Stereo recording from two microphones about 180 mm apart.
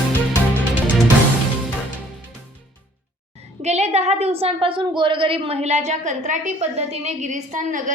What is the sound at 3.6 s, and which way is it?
A woman's voice, 40° right (ahead or behind).